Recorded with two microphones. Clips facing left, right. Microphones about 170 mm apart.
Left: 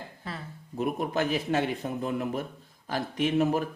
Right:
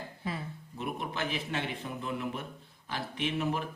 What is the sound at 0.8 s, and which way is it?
A man's voice, 45° left (ahead or behind).